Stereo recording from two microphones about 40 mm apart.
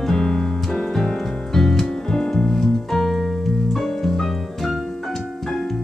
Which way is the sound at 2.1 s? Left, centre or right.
Centre.